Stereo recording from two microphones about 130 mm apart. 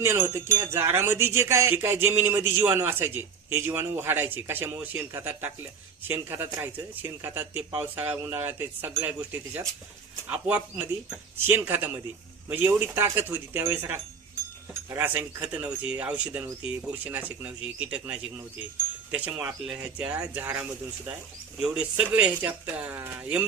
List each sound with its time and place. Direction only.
0.0 s speech: 20° right (ahead or behind)